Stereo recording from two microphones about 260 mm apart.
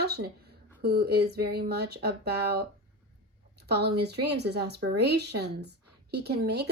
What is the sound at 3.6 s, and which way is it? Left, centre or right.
A woman's voice, right.